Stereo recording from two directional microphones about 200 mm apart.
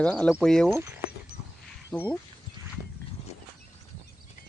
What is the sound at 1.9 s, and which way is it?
Speech, 10° left (ahead or behind).